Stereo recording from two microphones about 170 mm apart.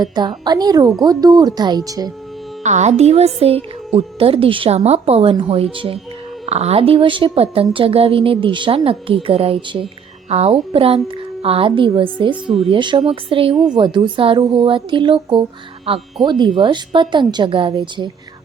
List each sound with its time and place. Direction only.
0.0 s a woman's voice: 25° right (ahead or behind)
2.6 s a woman's voice: 45° right (ahead or behind)